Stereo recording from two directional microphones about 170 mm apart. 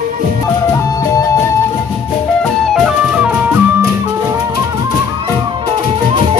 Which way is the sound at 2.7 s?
5° right (ahead or behind).